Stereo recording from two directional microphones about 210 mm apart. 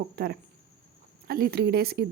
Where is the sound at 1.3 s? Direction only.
45° right (ahead or behind).